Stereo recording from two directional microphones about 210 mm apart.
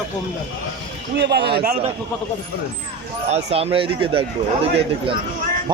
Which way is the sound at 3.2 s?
30° right (ahead or behind).